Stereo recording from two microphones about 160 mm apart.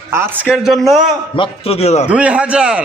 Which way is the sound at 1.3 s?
35° left (ahead or behind).